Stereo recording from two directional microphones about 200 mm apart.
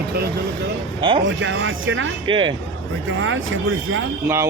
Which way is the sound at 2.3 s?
25° right (ahead or behind).